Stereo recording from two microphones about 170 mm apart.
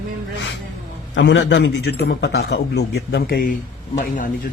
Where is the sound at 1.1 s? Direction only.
90° left; by 3.5 s 65° left (ahead or behind).